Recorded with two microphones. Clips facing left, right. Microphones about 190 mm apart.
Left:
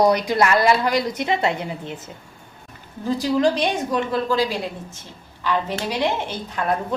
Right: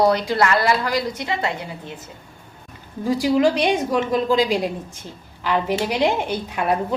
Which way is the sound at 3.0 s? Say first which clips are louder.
Right 2 dB; 10° right (ahead or behind).